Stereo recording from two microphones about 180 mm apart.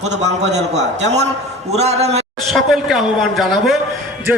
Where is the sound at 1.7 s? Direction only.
35° right (ahead or behind).